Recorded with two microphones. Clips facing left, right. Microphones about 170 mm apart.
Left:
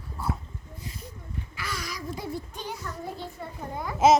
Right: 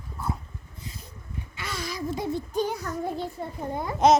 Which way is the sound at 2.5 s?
40° right (ahead or behind).